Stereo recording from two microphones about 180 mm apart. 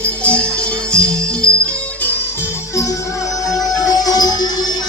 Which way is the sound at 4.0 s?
20° left (ahead or behind).